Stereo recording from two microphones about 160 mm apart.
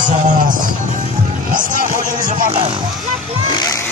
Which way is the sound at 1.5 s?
55° right (ahead or behind).